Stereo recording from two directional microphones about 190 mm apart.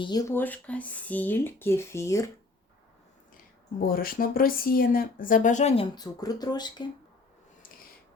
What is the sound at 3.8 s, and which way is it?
Speech, 50° left (ahead or behind).